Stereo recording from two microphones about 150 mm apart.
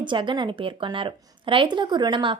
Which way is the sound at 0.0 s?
30° right (ahead or behind).